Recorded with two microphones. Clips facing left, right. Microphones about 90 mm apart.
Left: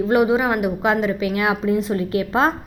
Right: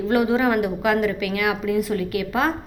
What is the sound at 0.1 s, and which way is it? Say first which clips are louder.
A woman's voice: left 1 dB; 20° left (ahead or behind).